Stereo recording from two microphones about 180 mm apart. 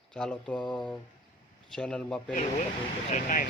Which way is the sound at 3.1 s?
45° left (ahead or behind).